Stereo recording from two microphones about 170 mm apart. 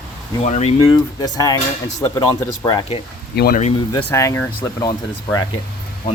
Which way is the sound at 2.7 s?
30° left (ahead or behind).